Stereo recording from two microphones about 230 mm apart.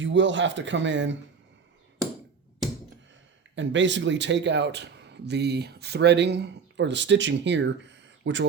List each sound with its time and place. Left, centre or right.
0.0 s speech: right
3.5 s speech: right